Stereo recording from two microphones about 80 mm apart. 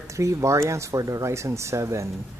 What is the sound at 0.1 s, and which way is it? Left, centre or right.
Speech, right.